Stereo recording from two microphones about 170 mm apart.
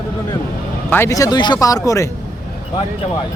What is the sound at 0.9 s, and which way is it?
Speech, 15° left (ahead or behind).